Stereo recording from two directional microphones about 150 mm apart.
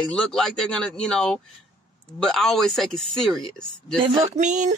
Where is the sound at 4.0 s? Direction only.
50° right (ahead or behind).